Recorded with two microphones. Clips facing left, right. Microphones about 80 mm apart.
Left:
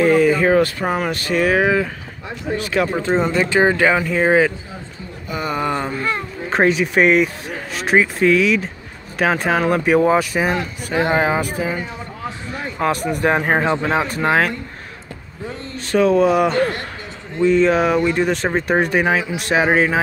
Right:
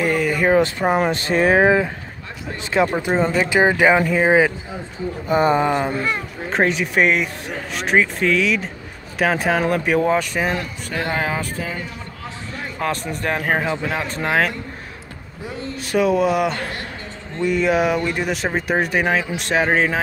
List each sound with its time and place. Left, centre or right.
0.0 s a sound: centre
0.6 s speech: centre
5.3 s speech: right
5.6 s speech: centre
6.5 s speech: centre